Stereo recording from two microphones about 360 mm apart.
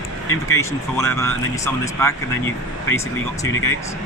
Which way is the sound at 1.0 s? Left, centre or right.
Centre.